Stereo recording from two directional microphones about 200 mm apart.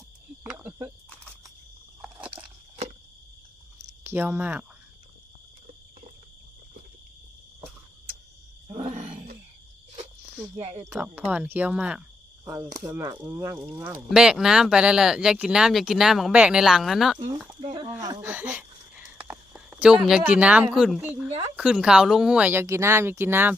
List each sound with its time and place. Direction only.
0.4 s cricket: 10° right (ahead or behind)
4.0 s speech: 10° right (ahead or behind)
8.6 s roaring cats: 35° right (ahead or behind)
10.6 s speech: 30° right (ahead or behind)
10.8 s speech: 5° right (ahead or behind)
17.2 s speech: 20° right (ahead or behind)
17.7 s a sound: 20° right (ahead or behind)
20.1 s speech: 5° right (ahead or behind)